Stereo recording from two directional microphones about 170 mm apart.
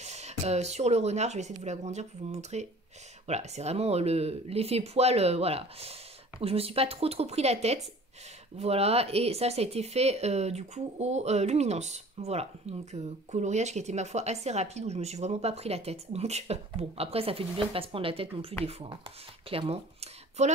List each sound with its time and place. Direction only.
0.0 s speech: 40° right (ahead or behind)